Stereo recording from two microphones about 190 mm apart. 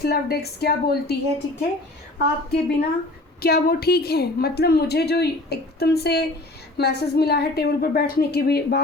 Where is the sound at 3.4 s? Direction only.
55° left (ahead or behind).